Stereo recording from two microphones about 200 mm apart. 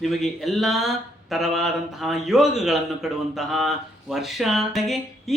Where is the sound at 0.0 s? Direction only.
Centre (ahead or behind).